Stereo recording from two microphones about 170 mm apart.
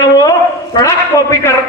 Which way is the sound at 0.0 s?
25° left (ahead or behind).